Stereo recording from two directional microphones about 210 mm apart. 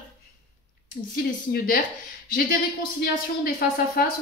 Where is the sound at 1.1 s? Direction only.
45° left (ahead or behind).